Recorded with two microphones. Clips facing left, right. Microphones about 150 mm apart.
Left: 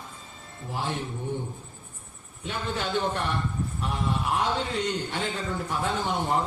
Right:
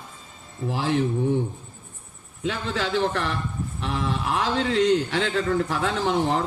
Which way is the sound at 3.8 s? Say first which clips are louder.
Right 3 dB; 90° right.